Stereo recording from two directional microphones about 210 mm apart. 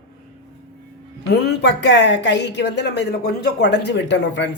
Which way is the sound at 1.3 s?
50° left (ahead or behind).